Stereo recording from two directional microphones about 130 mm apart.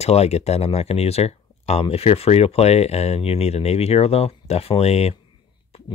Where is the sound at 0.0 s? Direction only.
55° left (ahead or behind).